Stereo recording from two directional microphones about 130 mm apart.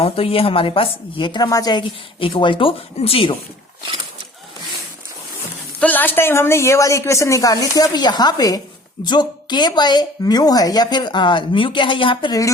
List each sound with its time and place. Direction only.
0.0 s a woman's voice: 45° left (ahead or behind)
5.8 s speech: 15° left (ahead or behind); by 12.4 s 40° left (ahead or behind)